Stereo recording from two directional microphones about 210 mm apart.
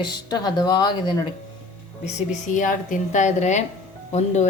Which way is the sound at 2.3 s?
35° left (ahead or behind).